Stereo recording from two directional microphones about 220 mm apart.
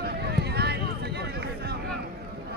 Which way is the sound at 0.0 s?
50° right (ahead or behind).